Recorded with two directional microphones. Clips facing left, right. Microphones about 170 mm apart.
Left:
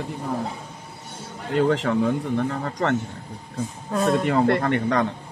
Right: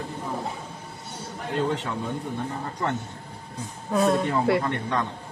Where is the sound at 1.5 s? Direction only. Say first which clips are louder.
Left 6 dB; 90° left.